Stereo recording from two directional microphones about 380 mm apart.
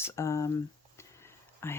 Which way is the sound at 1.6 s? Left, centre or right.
Centre.